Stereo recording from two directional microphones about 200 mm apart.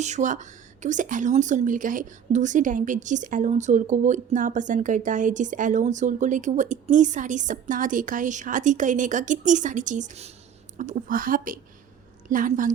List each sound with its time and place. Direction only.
0.0 s speech: 35° right (ahead or behind)